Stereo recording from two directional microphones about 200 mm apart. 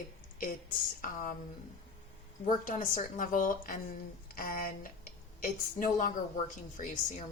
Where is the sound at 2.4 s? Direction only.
40° left (ahead or behind).